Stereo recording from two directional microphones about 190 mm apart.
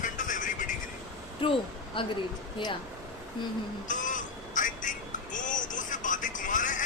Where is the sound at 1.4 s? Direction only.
30° left (ahead or behind).